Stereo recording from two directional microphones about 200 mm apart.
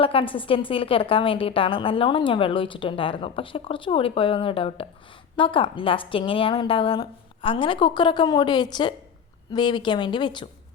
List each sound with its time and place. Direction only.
0.0 s a woman's voice: 25° left (ahead or behind)